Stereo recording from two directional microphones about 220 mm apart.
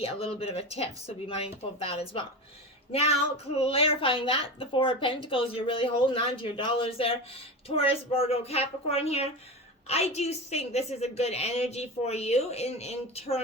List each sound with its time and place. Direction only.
0.0 s speech: 25° left (ahead or behind)